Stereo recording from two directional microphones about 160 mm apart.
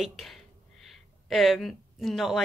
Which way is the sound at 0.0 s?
Centre (ahead or behind).